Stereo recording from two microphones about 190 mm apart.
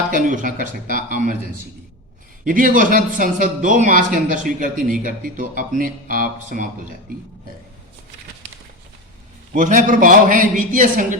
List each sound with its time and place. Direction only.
0.1 s speech: 45° right (ahead or behind)
2.5 s speech: 45° right (ahead or behind)
9.6 s speech: 45° right (ahead or behind)